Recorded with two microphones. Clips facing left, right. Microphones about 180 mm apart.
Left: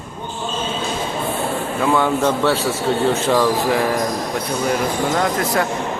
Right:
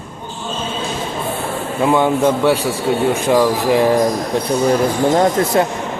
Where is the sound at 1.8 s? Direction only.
20° right (ahead or behind).